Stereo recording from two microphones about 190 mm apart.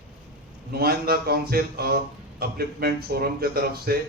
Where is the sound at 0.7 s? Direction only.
55° right (ahead or behind).